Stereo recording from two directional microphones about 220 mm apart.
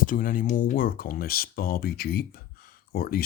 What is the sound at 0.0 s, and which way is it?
Speech, 40° left (ahead or behind).